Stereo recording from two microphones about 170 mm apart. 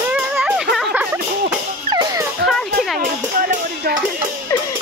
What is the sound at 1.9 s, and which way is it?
Dog, 20° right (ahead or behind).